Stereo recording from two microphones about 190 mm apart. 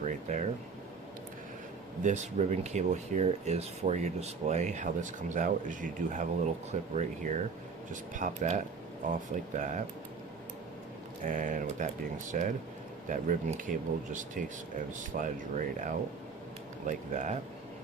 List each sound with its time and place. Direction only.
0.0 s air conditioning: 40° right (ahead or behind)
2.0 s speech: 40° right (ahead or behind)
11.3 s speech: 45° right (ahead or behind)